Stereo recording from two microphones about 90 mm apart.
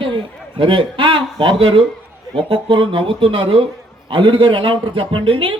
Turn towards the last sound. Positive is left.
turn(degrees=-75)  # may be behind; listen again after turning